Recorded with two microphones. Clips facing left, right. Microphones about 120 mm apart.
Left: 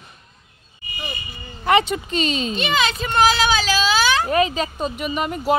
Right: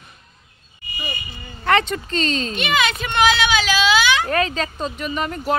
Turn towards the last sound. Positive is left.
turn(degrees=15)  # may be behind; listen again after turning